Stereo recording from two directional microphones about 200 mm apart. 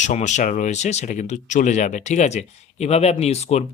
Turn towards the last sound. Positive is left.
turn(degrees=30)  # may be behind; listen again after turning